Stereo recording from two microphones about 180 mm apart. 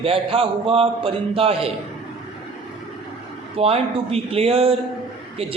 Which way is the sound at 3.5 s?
35° right (ahead or behind).